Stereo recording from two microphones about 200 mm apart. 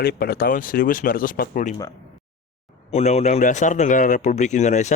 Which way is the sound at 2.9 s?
35° left (ahead or behind).